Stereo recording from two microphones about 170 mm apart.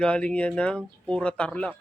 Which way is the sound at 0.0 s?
5° left (ahead or behind).